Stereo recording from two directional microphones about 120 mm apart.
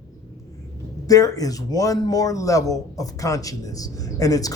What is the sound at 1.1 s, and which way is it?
Speech, 30° left (ahead or behind).